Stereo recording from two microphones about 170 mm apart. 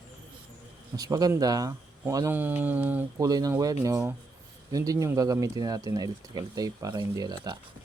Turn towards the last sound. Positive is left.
turn(degrees=-25)  # may be behind; listen again after turning